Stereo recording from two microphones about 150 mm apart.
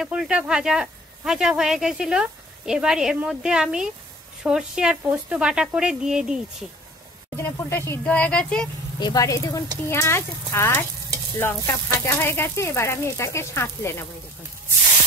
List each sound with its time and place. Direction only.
0.0 s speech: 5° right (ahead or behind)
7.3 s sizzle: 15° left (ahead or behind)
9.0 s speech: 25° left (ahead or behind)
9.8 s sizzle: 15° left (ahead or behind)